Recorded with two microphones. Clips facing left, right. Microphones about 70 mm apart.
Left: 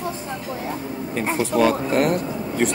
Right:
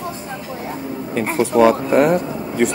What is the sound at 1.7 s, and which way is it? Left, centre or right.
Speech, centre.